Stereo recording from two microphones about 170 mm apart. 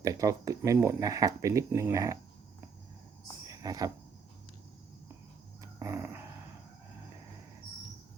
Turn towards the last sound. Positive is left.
turn(degrees=-15)  # may be behind; listen again after turning